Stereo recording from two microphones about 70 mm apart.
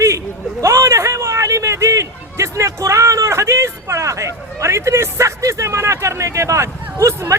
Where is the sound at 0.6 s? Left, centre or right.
Right.